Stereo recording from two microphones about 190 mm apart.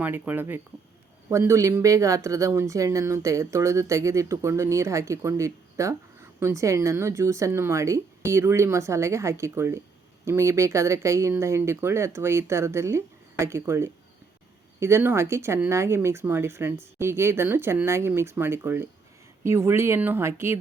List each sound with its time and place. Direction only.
0.0 s speech: 10° right (ahead or behind)